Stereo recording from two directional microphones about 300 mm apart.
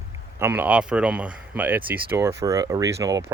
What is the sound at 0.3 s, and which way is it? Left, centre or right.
Speech, centre.